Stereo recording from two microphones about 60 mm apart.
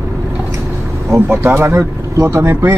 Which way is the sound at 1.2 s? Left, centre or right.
Right.